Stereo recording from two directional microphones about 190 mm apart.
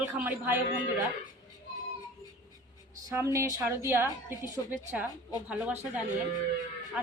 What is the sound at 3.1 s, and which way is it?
A woman's voice, 15° right (ahead or behind).